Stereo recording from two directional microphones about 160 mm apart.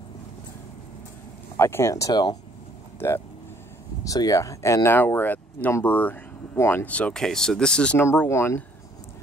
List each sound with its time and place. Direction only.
1.6 s speech: 15° left (ahead or behind)
4.0 s speech: 20° left (ahead or behind)